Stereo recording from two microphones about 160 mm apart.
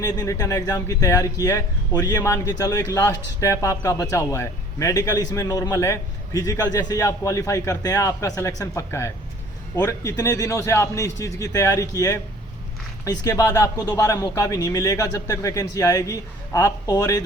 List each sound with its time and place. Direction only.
0.0 s speech: 25° left (ahead or behind)